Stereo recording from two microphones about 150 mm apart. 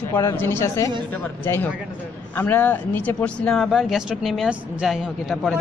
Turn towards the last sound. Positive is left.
turn(degrees=0)  # may be behind; listen again after turning